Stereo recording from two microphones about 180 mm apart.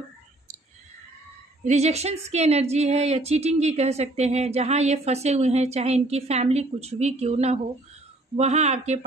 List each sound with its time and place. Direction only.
1.6 s a woman's voice: 40° right (ahead or behind)